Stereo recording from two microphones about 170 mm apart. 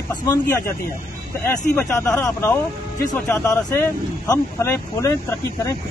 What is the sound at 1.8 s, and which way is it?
Speech, 10° left (ahead or behind).